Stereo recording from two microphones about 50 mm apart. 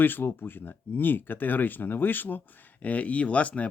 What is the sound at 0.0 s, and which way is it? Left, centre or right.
Speech, left.